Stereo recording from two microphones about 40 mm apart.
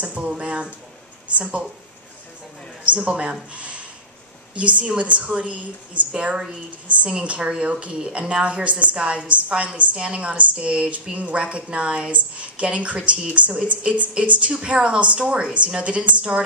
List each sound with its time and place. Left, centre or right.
0.0 s speech: right
2.8 s speech: right
3.1 s a woman's voice: right
3.5 s a sound: right
4.6 s a woman's voice: right
7.1 s a woman's voice: right